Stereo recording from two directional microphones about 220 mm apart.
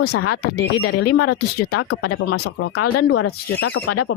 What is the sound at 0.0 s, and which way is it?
Speech, 90° left.